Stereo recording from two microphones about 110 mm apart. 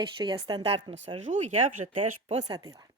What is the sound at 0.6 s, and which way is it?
Speech, 60° right (ahead or behind).